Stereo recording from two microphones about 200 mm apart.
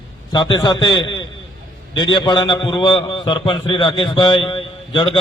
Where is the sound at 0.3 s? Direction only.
20° left (ahead or behind).